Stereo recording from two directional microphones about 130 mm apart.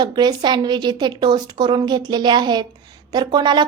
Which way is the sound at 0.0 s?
35° right (ahead or behind).